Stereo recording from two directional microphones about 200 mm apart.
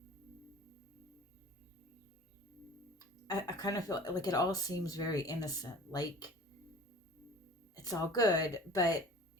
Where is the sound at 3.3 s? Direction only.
15° left (ahead or behind).